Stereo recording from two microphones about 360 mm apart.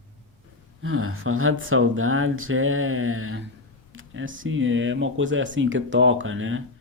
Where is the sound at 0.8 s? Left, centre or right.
Right.